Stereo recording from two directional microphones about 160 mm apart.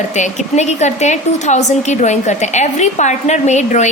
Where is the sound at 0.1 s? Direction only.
45° left (ahead or behind).